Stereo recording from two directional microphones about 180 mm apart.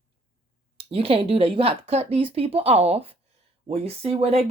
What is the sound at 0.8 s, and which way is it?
Speech, 30° right (ahead or behind).